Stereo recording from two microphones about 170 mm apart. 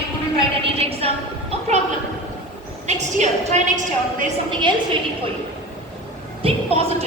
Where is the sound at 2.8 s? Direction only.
45° right (ahead or behind).